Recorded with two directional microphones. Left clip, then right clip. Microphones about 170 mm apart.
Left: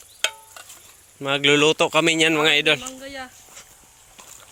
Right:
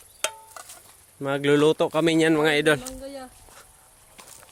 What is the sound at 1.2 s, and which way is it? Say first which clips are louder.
A man's voice: left 3 dB; 20° right (ahead or behind).